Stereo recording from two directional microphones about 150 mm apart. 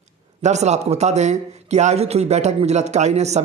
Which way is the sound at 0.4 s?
50° right (ahead or behind).